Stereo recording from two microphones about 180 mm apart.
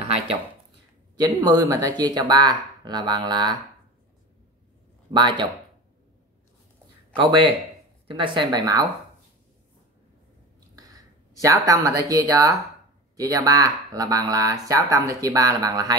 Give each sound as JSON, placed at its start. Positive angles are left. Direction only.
{"t": 0.0, "sound": "a sound", "side_deg": -35}
{"t": 1.1, "sound": "speech", "side_deg": -20}
{"t": 5.1, "sound": "speech", "side_deg": -25}
{"t": 8.1, "sound": "speech", "side_deg": -25}
{"t": 10.8, "sound": "speech", "side_deg": -20}